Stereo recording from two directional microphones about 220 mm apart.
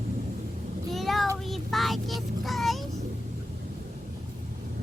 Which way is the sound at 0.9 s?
Centre (ahead or behind).